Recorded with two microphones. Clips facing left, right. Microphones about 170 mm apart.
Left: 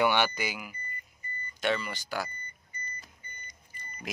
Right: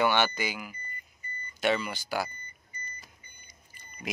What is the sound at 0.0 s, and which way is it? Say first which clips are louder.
Speech: even; 10° left (ahead or behind).